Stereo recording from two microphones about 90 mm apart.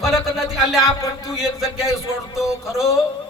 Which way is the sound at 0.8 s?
35° left (ahead or behind).